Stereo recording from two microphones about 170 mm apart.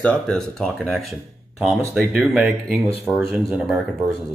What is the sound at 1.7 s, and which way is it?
Speech, 15° right (ahead or behind).